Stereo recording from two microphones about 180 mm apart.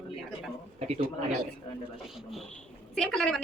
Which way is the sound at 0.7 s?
35° right (ahead or behind).